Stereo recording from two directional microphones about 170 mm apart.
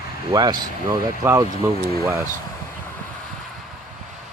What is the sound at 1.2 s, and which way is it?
Speech, 10° right (ahead or behind).